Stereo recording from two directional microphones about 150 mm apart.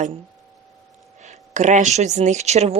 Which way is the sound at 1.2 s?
50° right (ahead or behind).